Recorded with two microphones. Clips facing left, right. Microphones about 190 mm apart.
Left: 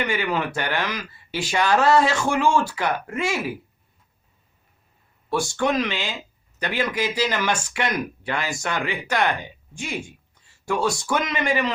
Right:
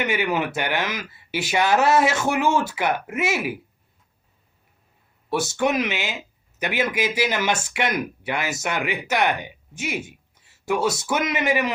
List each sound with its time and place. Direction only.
0.0 s speech: 20° right (ahead or behind)
5.3 s speech: 20° right (ahead or behind)